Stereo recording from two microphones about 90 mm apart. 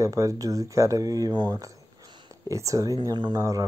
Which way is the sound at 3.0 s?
50° right (ahead or behind).